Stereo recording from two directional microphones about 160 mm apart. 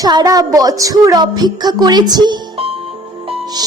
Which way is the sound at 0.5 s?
20° right (ahead or behind).